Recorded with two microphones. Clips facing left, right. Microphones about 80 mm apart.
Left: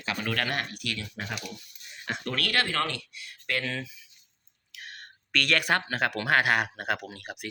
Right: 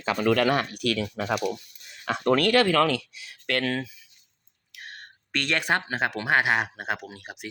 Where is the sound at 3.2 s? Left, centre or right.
Right.